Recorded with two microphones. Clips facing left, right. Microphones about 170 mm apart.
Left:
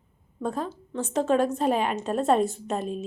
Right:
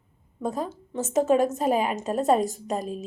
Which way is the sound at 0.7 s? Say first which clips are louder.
Right 1 dB; 40° right (ahead or behind).